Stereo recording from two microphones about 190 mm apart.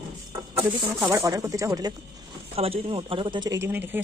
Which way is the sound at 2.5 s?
30° right (ahead or behind).